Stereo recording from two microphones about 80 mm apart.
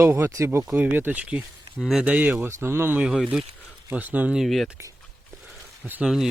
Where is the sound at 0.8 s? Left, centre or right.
Right.